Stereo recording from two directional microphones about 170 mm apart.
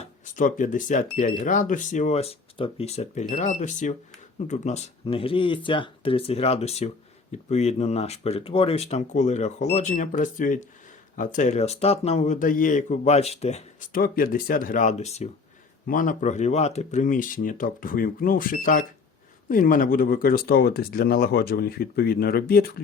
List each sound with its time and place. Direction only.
0.0 s speech: 50° left (ahead or behind)
13.9 s speech: 55° left (ahead or behind); by 15.3 s 40° left (ahead or behind)
15.9 s speech: 55° left (ahead or behind)